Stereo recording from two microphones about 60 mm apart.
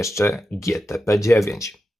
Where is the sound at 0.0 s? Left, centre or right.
Left.